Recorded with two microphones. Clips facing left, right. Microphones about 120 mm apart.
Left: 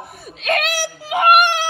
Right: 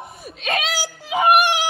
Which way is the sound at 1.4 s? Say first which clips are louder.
Left 2 dB; 15° right (ahead or behind).